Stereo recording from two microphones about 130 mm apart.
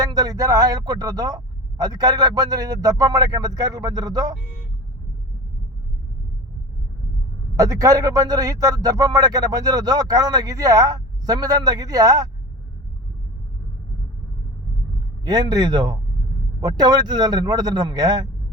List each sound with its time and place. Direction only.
0.0 s speech: 30° right (ahead or behind)
7.5 s speech: 25° right (ahead or behind)
15.2 s speech: 30° right (ahead or behind)